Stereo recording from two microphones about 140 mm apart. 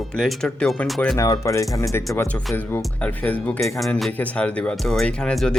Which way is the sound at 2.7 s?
10° left (ahead or behind).